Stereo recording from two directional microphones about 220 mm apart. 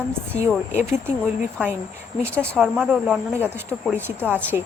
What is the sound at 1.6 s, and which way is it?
Speech, 5° right (ahead or behind).